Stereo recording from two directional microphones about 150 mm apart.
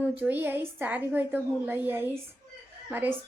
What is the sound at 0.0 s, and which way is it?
A woman's voice, 10° right (ahead or behind).